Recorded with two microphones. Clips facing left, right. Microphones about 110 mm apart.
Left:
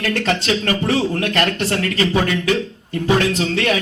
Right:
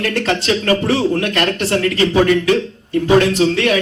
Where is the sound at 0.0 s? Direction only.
35° right (ahead or behind).